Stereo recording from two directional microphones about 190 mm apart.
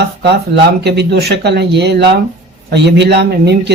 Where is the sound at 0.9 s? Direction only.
60° right (ahead or behind).